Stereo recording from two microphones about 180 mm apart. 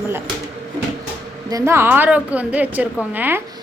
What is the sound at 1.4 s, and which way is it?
A woman's voice, 15° right (ahead or behind).